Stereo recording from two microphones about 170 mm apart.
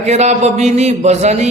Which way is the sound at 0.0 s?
40° right (ahead or behind).